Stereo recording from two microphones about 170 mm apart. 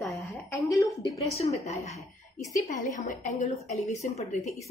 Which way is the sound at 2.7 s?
45° left (ahead or behind).